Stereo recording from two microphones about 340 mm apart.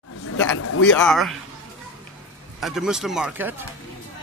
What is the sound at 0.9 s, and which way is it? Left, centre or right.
Speech, centre.